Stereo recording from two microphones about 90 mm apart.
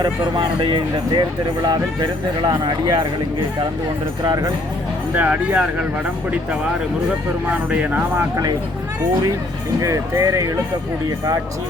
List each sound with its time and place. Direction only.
0.0 s speech: 65° right (ahead or behind)
1.6 s speech: 55° right (ahead or behind)
4.2 s speech: 45° right (ahead or behind)
5.1 s speech: 20° right (ahead or behind)
7.4 s speech: 15° right (ahead or behind)
9.8 s speech: 35° right (ahead or behind)